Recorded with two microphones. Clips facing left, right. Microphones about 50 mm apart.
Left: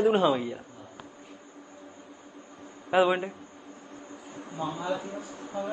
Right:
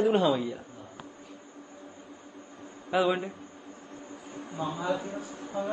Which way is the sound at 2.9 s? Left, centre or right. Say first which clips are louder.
Left 4 dB; centre.